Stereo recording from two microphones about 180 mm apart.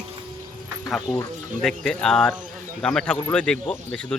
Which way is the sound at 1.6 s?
Centre (ahead or behind).